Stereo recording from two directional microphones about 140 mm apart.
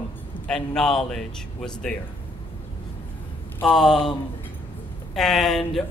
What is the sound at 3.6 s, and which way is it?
Speech, 5° left (ahead or behind).